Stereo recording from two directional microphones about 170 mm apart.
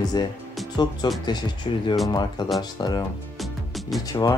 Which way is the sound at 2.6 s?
25° left (ahead or behind).